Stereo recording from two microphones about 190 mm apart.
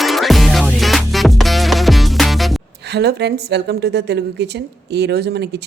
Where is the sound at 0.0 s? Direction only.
Centre (ahead or behind).